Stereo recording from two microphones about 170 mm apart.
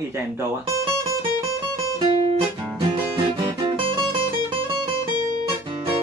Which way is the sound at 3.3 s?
30° right (ahead or behind).